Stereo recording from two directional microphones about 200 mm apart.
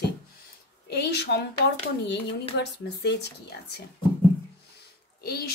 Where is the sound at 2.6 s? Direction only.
60° left (ahead or behind).